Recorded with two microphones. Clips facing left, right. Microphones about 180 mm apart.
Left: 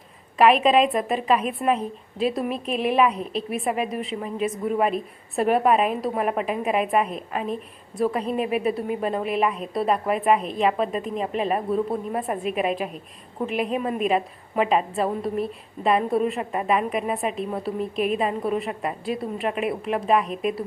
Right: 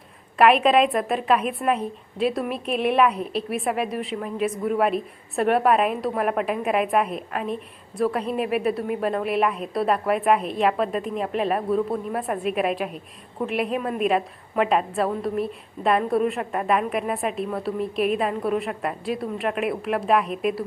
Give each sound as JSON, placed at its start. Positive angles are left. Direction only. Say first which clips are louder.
{"t": 0.3, "sound": "a woman's voice", "louder": "even", "side_deg": 0}